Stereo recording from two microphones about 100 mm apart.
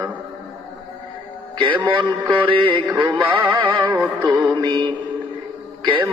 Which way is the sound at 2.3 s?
60° right (ahead or behind).